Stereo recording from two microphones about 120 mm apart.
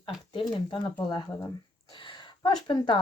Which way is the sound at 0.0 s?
45° left (ahead or behind).